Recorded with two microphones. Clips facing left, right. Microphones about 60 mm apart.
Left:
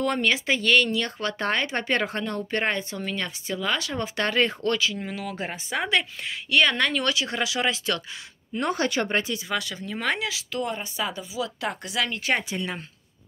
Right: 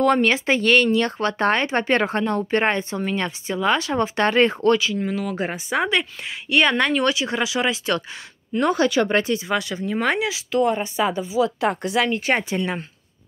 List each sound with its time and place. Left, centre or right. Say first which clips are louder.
0.0 s speech: right 6 dB; right
4.7 s speech: right 5 dB; centre
6.5 s speech: right 3 dB; right
8.5 s speech: right 7 dB; right
9.1 s speech: right 5 dB; right
9.5 s speech: right 6 dB; right